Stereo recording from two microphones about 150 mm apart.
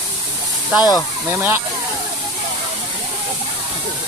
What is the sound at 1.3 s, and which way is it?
Speech, 15° right (ahead or behind).